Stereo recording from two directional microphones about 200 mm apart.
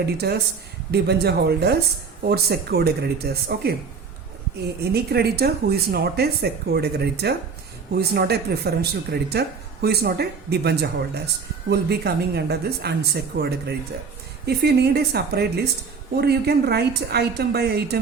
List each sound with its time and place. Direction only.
0.0 s speech: 55° right (ahead or behind)
4.8 s speech: 55° right (ahead or behind)